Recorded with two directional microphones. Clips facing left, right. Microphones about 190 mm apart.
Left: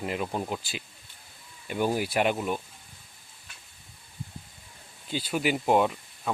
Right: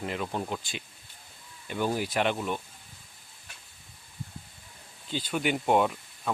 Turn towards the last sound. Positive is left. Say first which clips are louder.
# left 1 dB
turn(degrees=0)  # may be behind; listen again after turning